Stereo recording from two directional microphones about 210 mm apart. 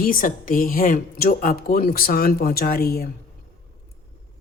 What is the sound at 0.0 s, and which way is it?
Speech, 40° left (ahead or behind).